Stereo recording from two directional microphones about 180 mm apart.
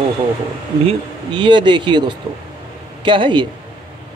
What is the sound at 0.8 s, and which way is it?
Speech, 25° right (ahead or behind).